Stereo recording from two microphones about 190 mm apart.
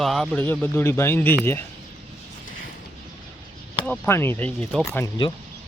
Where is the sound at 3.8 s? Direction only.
10° left (ahead or behind).